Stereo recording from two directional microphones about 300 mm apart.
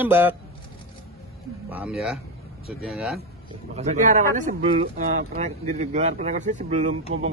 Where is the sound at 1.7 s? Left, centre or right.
Centre.